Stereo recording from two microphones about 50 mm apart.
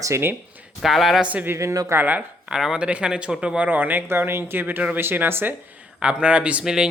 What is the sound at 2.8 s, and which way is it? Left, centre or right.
Speech, right.